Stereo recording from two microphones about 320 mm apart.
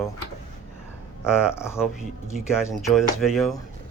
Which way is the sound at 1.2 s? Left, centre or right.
Centre.